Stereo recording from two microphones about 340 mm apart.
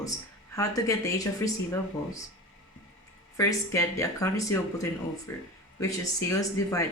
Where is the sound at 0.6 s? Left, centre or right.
Centre.